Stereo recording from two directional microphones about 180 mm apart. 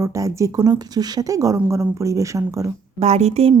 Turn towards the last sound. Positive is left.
turn(degrees=-35)  # may be behind; listen again after turning